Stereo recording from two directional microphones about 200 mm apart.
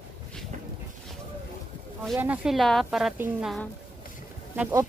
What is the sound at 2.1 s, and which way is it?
A woman's voice, 10° right (ahead or behind).